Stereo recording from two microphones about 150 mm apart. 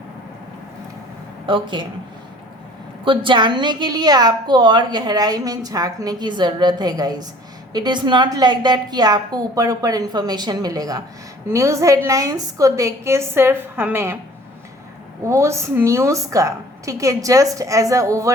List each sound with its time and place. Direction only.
1.5 s speech: 35° right (ahead or behind)
3.0 s a woman's voice: 35° right (ahead or behind); by 14.2 s 15° right (ahead or behind)
15.2 s a woman's voice: 20° right (ahead or behind)